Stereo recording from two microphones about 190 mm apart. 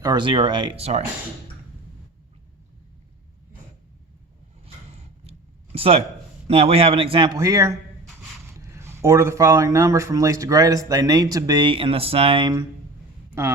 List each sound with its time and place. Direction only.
0.0 s a man's voice: 20° right (ahead or behind)
5.7 s a man's voice: 30° right (ahead or behind)